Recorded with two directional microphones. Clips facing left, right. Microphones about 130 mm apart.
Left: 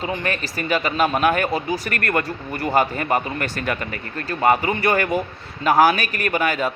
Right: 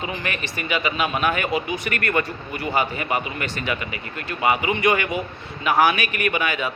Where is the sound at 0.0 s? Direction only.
35° left (ahead or behind).